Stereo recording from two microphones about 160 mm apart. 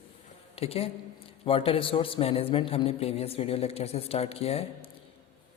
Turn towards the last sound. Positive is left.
turn(degrees=40)  # may be behind; listen again after turning